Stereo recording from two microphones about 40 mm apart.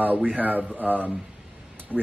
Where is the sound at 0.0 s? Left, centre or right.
Right.